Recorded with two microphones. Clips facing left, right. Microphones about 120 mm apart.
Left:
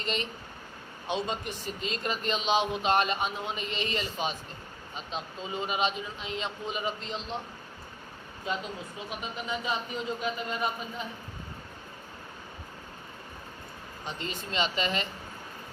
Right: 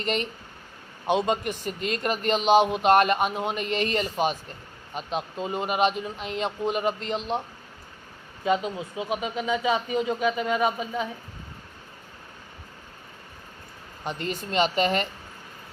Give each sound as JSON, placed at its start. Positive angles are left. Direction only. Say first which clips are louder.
{"t": 0.0, "sound": "a man's voice", "louder": "right 5 dB", "side_deg": -55}
{"t": 9.0, "sound": "speech", "louder": "right 9 dB", "side_deg": -90}
{"t": 14.0, "sound": "speech", "louder": "right 6 dB", "side_deg": -55}